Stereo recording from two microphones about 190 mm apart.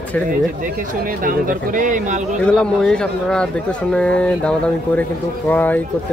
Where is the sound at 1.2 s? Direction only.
45° right (ahead or behind).